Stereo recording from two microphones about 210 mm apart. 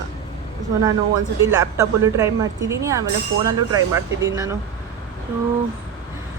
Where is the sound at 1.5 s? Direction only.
15° right (ahead or behind).